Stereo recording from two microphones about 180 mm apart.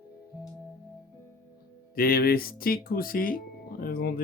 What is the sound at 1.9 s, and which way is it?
Speech, 55° left (ahead or behind).